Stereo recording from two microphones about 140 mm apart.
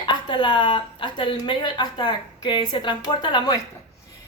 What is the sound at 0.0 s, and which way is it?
Speech, 35° left (ahead or behind).